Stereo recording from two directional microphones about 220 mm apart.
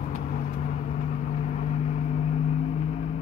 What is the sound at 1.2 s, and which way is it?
Vehicle, 30° left (ahead or behind).